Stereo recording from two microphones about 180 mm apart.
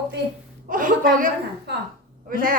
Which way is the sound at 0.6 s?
50° right (ahead or behind).